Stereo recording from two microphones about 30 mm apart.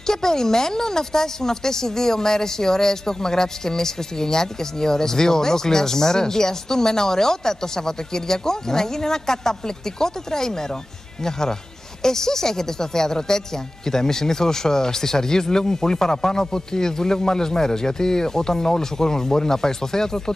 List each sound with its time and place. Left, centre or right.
0.0 s speech: centre